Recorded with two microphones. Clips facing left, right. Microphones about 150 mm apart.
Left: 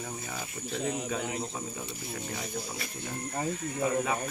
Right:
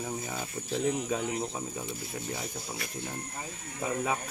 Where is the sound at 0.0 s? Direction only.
15° right (ahead or behind).